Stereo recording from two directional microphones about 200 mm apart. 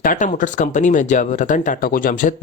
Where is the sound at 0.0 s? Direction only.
40° left (ahead or behind).